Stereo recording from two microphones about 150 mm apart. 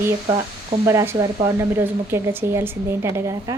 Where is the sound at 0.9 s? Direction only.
20° right (ahead or behind).